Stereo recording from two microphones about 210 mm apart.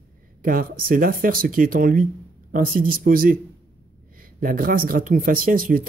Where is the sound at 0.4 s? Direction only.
40° right (ahead or behind).